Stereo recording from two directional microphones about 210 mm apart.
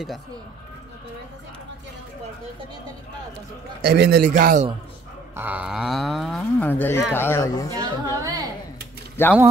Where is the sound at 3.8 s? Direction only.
50° right (ahead or behind).